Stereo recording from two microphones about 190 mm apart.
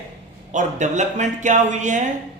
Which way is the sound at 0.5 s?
40° right (ahead or behind).